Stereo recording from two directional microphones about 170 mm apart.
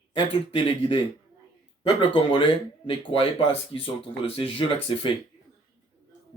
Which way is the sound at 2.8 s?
30° left (ahead or behind).